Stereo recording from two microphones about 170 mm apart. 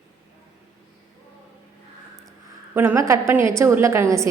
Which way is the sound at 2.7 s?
15° right (ahead or behind).